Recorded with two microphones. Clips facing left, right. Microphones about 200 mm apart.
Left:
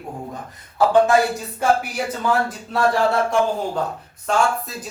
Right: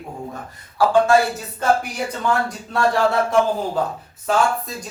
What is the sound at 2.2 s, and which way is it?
Speech, centre (ahead or behind).